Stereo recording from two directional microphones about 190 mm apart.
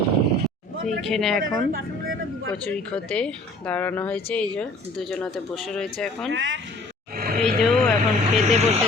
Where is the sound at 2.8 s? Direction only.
5° left (ahead or behind).